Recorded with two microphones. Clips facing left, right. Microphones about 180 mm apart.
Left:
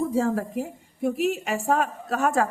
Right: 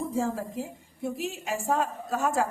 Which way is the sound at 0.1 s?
65° left (ahead or behind).